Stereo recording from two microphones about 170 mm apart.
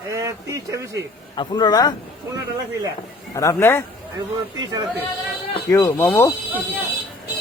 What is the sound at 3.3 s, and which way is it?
Speech, 20° left (ahead or behind).